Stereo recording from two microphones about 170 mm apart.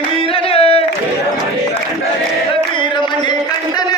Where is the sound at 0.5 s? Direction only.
35° left (ahead or behind).